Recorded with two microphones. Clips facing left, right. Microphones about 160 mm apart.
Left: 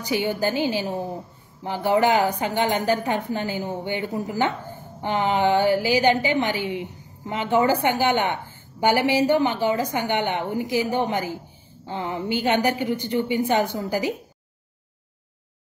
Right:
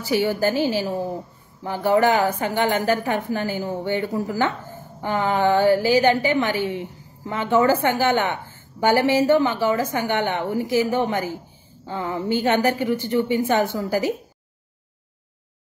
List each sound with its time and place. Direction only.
0.0 s a woman's voice: 15° left (ahead or behind)